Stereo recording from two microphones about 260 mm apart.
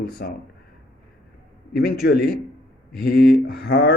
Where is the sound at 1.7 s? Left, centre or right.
Left.